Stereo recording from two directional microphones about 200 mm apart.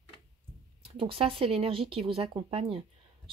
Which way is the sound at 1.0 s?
25° right (ahead or behind).